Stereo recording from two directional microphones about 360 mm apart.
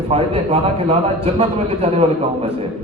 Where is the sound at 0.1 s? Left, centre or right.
Centre.